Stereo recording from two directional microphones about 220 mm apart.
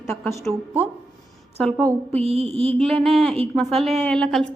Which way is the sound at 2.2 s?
25° right (ahead or behind).